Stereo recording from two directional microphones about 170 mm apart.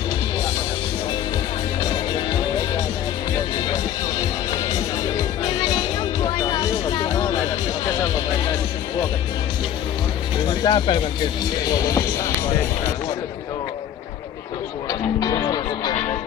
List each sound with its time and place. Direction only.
6.2 s music: 20° left (ahead or behind)
10.4 s speech: 30° left (ahead or behind)
11.7 s music: 20° left (ahead or behind)
14.9 s music: 25° left (ahead or behind)